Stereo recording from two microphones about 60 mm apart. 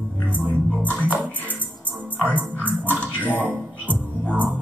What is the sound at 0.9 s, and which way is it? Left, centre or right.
Music, right.